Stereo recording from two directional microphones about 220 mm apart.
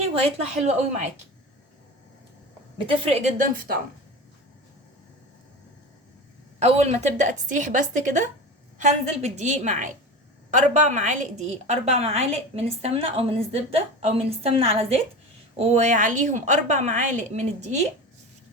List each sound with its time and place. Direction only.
0.0 s a woman's voice: 25° right (ahead or behind)
2.8 s a woman's voice: 25° right (ahead or behind)
6.6 s a woman's voice: 30° right (ahead or behind)